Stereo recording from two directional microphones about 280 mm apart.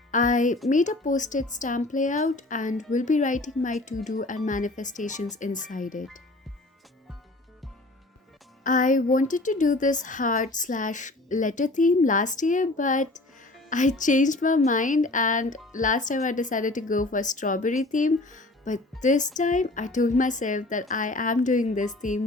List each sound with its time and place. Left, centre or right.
0.1 s music: left
0.7 s speech: left
8.6 s speech: left